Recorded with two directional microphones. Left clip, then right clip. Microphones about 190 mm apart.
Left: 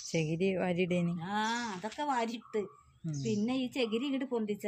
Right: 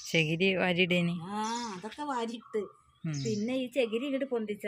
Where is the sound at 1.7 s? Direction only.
5° left (ahead or behind).